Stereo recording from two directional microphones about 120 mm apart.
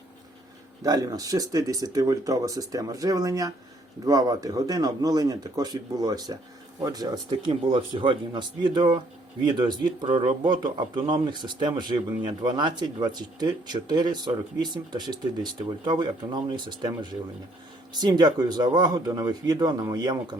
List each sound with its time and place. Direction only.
0.8 s speech: 30° right (ahead or behind)
7.3 s speech: 45° right (ahead or behind)